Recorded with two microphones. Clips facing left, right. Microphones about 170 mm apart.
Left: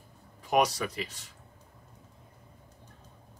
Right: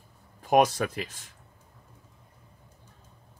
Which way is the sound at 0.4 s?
50° right (ahead or behind).